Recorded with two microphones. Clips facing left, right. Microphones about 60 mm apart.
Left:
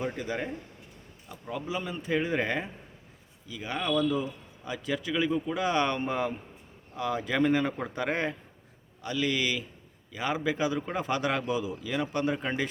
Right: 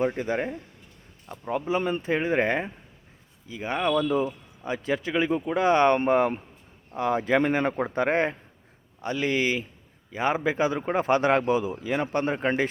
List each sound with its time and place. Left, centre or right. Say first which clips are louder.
0.0 s speech: right 6 dB; right